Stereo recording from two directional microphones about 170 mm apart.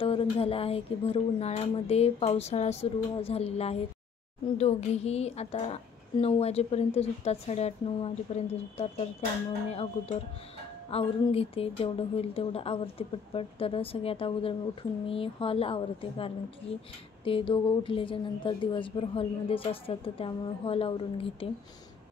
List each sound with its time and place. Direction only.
0.0 s speech: 35° left (ahead or behind)